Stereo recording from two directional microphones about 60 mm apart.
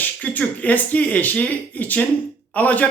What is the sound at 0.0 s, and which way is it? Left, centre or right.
Speech, left.